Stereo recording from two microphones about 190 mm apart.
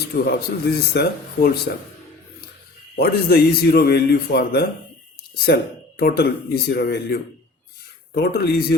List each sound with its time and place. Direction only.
0.3 s a man's voice: 60° left (ahead or behind)
3.0 s a man's voice: 55° left (ahead or behind)
6.0 s a man's voice: 55° left (ahead or behind)